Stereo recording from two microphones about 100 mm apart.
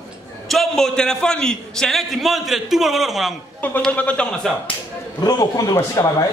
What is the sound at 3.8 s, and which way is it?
Speech, 15° left (ahead or behind).